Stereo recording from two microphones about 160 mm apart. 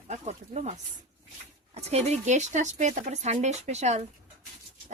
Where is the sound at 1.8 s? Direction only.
40° right (ahead or behind).